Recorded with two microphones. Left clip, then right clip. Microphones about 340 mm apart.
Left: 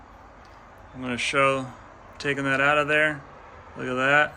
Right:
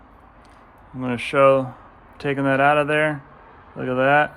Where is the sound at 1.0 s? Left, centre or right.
Centre.